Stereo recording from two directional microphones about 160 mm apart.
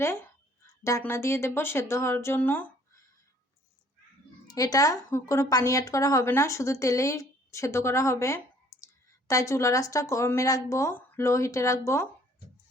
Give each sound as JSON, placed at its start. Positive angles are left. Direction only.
{"t": 0.9, "sound": "speech", "side_deg": 15}
{"t": 4.4, "sound": "a woman's voice", "side_deg": 25}